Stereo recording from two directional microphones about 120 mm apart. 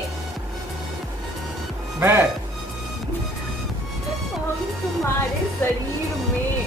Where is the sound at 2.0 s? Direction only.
20° right (ahead or behind).